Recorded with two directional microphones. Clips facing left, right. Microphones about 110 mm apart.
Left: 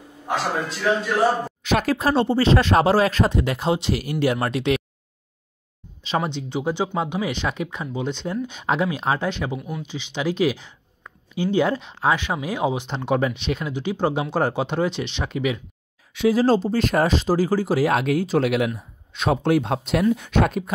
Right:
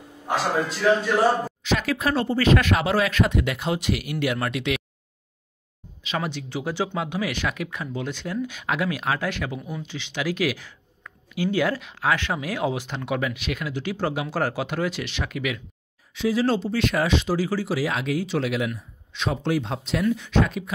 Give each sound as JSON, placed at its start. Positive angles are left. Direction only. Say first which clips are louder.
{"t": 0.2, "sound": "a man's voice", "louder": "right 1 dB", "side_deg": 0}
{"t": 1.6, "sound": "speech", "louder": "left 4 dB", "side_deg": 50}
{"t": 2.0, "sound": "speech", "louder": "left 4 dB", "side_deg": 30}
{"t": 6.0, "sound": "speech", "louder": "left 4 dB", "side_deg": 25}
{"t": 9.6, "sound": "a man's voice", "louder": "left 2 dB", "side_deg": 5}
{"t": 9.8, "sound": "speech", "louder": "left 3 dB", "side_deg": 15}
{"t": 16.1, "sound": "speech", "louder": "left 5 dB", "side_deg": 60}
{"t": 16.3, "sound": "speech", "louder": "left 3 dB", "side_deg": 40}